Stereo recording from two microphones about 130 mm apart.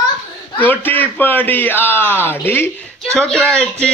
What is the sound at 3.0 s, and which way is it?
Speech, 5° left (ahead or behind).